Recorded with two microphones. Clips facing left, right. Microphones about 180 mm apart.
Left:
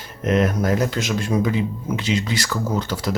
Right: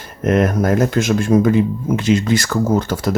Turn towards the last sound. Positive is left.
turn(degrees=-50)  # may be behind; listen again after turning